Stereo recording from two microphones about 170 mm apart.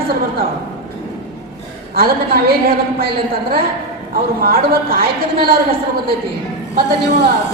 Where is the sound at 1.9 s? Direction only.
60° right (ahead or behind).